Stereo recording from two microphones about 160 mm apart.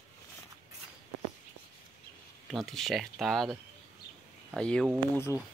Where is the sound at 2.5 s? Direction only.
Centre (ahead or behind).